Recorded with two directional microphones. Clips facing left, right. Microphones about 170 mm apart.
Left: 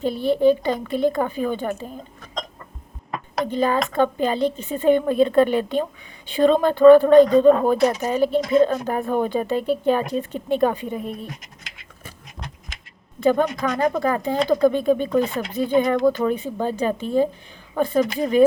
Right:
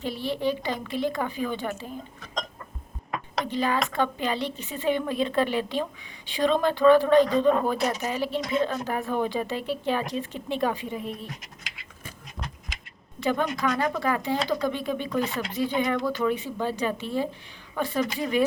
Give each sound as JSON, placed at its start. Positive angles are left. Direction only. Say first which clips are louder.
{"t": 0.3, "sound": "speech", "louder": "left 12 dB", "side_deg": 50}
{"t": 3.4, "sound": "speech", "louder": "left 6 dB", "side_deg": 45}
{"t": 13.3, "sound": "speech", "louder": "left 4 dB", "side_deg": 40}